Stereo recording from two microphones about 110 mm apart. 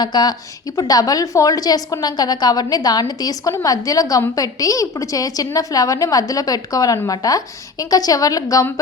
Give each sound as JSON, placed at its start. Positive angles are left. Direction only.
{"t": 0.0, "sound": "a woman's voice", "side_deg": 40}